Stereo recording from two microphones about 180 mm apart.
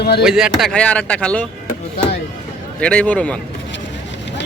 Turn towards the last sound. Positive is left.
turn(degrees=5)  # may be behind; listen again after turning